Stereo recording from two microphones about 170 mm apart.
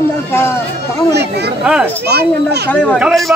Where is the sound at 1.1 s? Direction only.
75° right (ahead or behind).